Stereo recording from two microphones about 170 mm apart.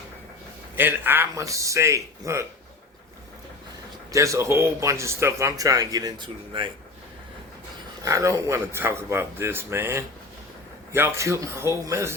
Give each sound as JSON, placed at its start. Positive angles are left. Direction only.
{"t": 0.8, "sound": "a man's voice", "side_deg": -10}
{"t": 4.1, "sound": "speech", "side_deg": -20}
{"t": 8.0, "sound": "speech", "side_deg": -20}